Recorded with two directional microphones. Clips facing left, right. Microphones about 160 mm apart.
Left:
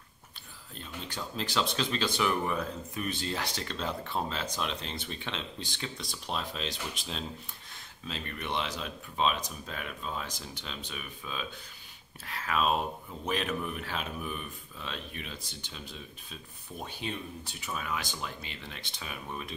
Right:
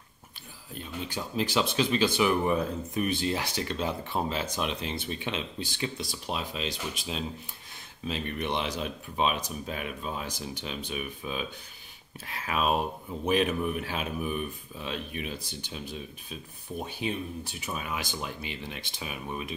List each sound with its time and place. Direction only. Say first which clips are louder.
0.7 s speech: right 4 dB; 10° right (ahead or behind)
8.1 s speech: right 5 dB; 20° right (ahead or behind)
17.6 s speech: right 1 dB; 15° right (ahead or behind)